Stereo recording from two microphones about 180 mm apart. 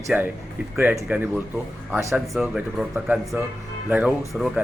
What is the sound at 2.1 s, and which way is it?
Speech, 5° right (ahead or behind).